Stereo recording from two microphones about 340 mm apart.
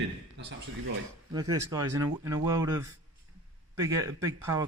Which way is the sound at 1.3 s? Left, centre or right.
Centre.